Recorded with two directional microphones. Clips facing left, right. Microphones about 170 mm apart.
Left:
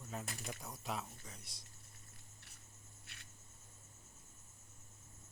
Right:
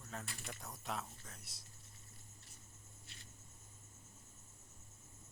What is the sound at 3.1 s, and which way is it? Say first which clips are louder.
Cricket: even; 65° left (ahead or behind).